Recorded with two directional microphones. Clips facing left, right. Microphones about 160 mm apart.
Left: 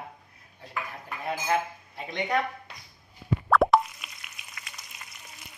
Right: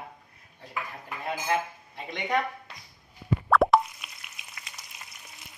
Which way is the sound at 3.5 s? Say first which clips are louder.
Even; centre (ahead or behind).